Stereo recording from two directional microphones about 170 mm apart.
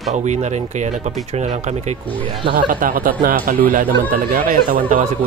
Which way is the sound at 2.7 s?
55° right (ahead or behind).